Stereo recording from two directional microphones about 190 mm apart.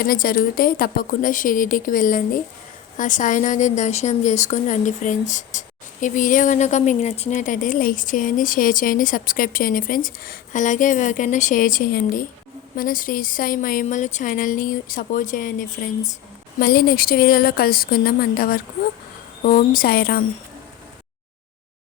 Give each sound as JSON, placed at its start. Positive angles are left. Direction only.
{"t": 0.0, "sound": "a woman's voice", "side_deg": 50}